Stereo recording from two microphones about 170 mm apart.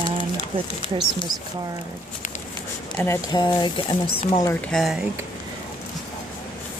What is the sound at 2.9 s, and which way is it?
Speech, 15° left (ahead or behind).